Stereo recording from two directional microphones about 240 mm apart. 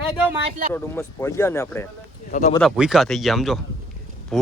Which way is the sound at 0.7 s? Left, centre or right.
Centre.